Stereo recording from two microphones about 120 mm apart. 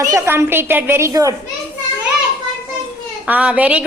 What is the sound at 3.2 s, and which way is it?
Speech, 10° right (ahead or behind).